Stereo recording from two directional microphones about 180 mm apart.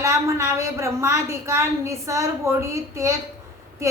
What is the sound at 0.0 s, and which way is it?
A woman's voice, 15° right (ahead or behind).